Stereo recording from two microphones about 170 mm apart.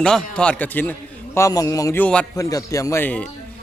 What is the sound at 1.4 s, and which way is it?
A man's voice, 20° left (ahead or behind).